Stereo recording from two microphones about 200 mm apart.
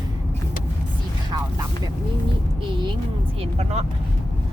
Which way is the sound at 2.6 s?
25° right (ahead or behind).